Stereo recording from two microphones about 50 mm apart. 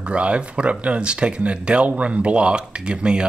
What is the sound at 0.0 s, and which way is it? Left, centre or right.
Speech, right.